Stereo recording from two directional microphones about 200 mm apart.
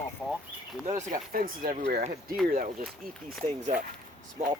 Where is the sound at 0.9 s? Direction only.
40° right (ahead or behind).